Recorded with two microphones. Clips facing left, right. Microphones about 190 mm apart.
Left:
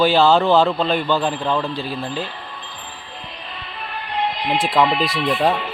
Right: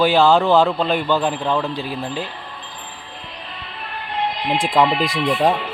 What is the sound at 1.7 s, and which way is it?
Speech, 15° right (ahead or behind).